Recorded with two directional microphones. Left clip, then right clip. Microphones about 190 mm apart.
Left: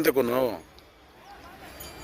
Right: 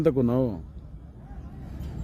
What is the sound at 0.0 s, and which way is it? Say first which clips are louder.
Speech: left 1 dB; centre (ahead or behind).